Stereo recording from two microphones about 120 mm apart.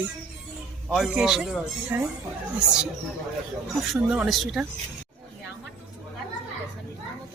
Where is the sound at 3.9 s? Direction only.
5° right (ahead or behind).